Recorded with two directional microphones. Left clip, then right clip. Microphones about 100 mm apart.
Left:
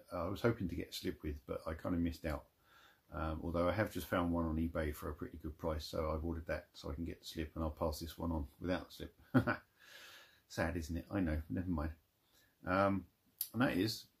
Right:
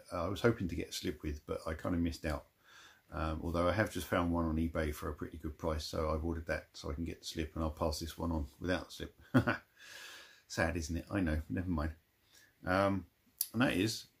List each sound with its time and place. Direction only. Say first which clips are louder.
0.1 s speech: right 4 dB; 20° right (ahead or behind)